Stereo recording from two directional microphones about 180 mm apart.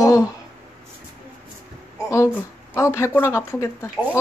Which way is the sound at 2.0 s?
15° left (ahead or behind).